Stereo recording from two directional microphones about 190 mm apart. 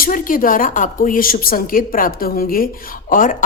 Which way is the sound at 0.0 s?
45° left (ahead or behind).